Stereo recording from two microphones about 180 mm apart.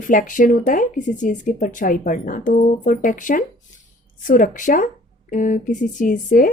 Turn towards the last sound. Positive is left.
turn(degrees=50)  # may be behind; listen again after turning